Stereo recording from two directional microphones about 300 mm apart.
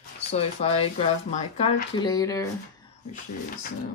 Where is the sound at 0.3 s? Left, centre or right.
Centre.